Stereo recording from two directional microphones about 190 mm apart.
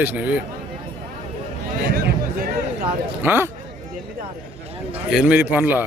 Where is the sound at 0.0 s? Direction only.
10° right (ahead or behind).